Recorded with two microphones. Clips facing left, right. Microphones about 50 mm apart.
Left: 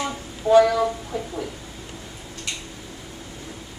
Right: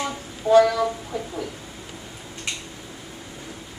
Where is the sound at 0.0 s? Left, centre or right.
Centre.